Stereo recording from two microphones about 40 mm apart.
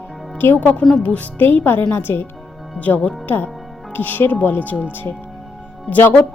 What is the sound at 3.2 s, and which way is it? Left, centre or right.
Speech, left.